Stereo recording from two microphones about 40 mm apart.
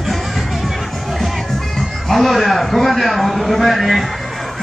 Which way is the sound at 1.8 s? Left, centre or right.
Centre.